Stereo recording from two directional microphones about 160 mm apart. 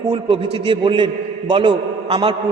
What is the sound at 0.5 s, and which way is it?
A man's voice, 35° right (ahead or behind).